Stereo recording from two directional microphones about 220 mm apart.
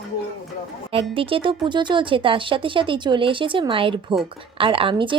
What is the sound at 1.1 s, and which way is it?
A woman's voice, 25° right (ahead or behind).